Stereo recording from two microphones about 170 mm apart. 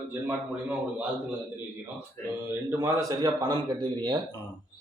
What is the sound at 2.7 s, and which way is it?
Speech, 15° right (ahead or behind).